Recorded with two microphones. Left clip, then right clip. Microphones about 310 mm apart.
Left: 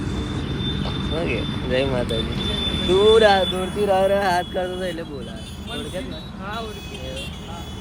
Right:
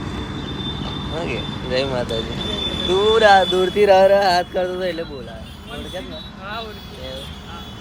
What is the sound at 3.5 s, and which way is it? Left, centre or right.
Speech, right.